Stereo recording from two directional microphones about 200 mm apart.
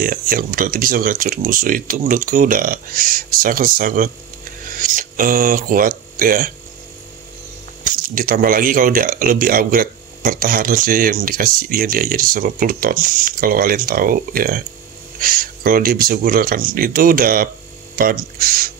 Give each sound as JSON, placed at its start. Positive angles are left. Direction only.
{"t": 0.0, "sound": "speech", "side_deg": -45}
{"t": 7.8, "sound": "speech", "side_deg": -45}